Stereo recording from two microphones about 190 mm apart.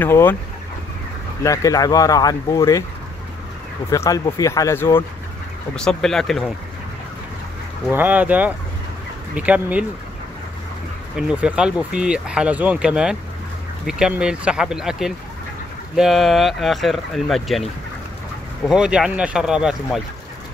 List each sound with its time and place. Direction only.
0.0 s speech: 10° left (ahead or behind)
1.4 s speech: 15° left (ahead or behind)
3.9 s speech: 15° left (ahead or behind)
5.8 s speech: 5° left (ahead or behind)
7.9 s speech: 10° right (ahead or behind)
11.1 s speech: 5° right (ahead or behind)
18.7 s speech: 5° right (ahead or behind)